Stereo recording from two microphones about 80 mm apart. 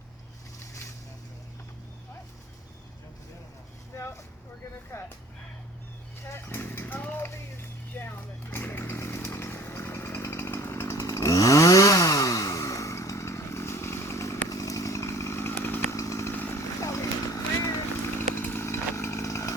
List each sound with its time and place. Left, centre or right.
3.9 s vehicle: left
6.2 s a sound: left
8.4 s chainsaw: left
16.0 s chainsaw: left
16.3 s chainsaw: left
16.8 s vehicle: left
18.2 s chainsaw: left